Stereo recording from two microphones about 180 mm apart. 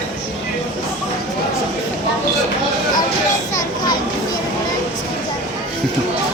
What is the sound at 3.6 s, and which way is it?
Children playing, 25° left (ahead or behind).